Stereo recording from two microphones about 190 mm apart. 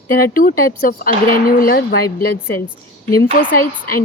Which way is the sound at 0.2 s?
50° left (ahead or behind).